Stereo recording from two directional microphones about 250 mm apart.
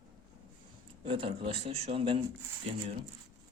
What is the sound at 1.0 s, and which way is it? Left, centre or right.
A man's voice, right.